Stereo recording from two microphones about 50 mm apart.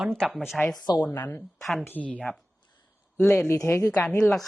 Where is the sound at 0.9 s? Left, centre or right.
Left.